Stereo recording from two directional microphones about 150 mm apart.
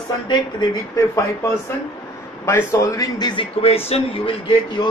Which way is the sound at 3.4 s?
40° left (ahead or behind).